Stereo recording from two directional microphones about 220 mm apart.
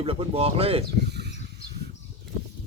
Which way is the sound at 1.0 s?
50° right (ahead or behind).